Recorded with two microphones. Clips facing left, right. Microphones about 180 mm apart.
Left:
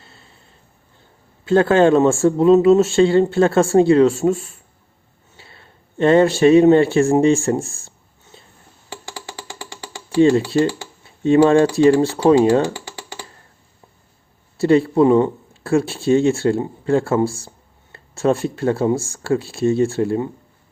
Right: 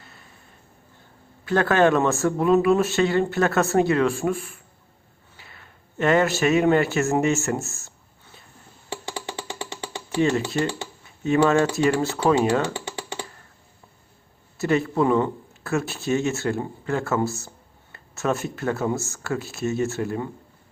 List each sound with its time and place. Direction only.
0.0 s a sound: 30° left (ahead or behind)
1.5 s a man's voice: 25° left (ahead or behind)
9.1 s music: 20° right (ahead or behind)
10.2 s a man's voice: 30° left (ahead or behind)
12.7 s computer keyboard: 20° right (ahead or behind)
14.6 s a man's voice: 30° left (ahead or behind)